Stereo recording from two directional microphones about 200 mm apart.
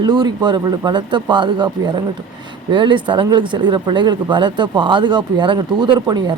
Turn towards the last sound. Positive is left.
turn(degrees=-20)  # may be behind; listen again after turning